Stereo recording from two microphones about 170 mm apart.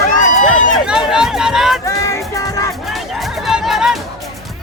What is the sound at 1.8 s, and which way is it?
Music, 20° left (ahead or behind).